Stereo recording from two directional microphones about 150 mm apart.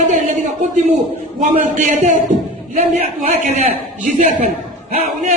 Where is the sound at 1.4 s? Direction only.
60° right (ahead or behind).